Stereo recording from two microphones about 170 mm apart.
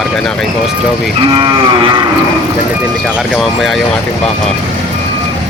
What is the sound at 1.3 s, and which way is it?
Cattle, 30° right (ahead or behind).